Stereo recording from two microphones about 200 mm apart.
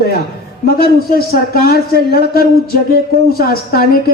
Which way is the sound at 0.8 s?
50° left (ahead or behind).